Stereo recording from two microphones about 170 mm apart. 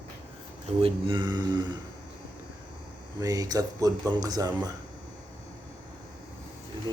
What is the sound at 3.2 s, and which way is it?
Speech, 20° right (ahead or behind).